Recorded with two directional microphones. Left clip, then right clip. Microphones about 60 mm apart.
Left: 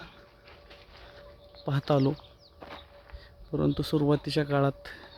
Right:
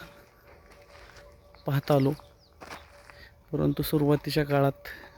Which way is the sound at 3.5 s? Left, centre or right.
Centre.